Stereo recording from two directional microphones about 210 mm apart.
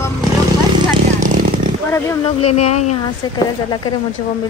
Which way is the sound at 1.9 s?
10° left (ahead or behind).